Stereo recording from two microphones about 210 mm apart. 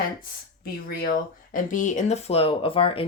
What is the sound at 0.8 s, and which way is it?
Speech, 45° left (ahead or behind).